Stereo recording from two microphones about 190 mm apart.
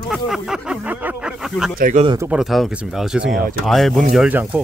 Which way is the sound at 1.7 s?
45° right (ahead or behind).